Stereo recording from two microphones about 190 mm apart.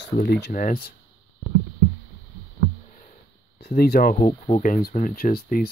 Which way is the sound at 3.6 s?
55° left (ahead or behind).